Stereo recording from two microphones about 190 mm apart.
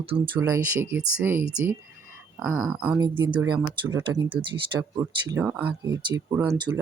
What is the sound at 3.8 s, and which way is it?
Speech, 15° right (ahead or behind).